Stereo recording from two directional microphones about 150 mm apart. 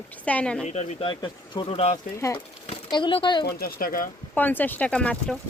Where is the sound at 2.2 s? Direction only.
20° left (ahead or behind).